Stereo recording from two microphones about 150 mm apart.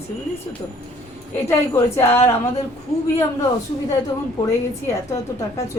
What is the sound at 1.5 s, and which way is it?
Speech, 20° left (ahead or behind).